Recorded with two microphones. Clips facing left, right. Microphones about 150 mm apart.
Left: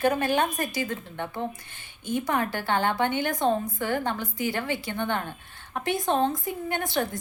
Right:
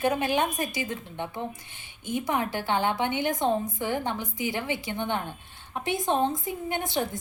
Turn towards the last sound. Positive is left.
turn(degrees=-20)  # may be behind; listen again after turning